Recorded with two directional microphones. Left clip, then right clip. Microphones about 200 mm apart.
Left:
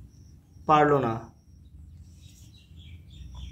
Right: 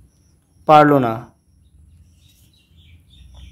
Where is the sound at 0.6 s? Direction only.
50° right (ahead or behind).